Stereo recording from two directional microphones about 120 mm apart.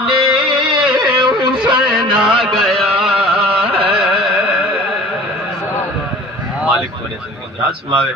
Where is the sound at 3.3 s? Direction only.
50° right (ahead or behind).